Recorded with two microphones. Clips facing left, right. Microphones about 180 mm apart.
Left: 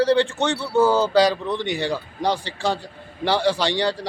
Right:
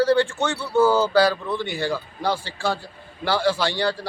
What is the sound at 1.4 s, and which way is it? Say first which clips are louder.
Speech: left 1 dB; 10° right (ahead or behind).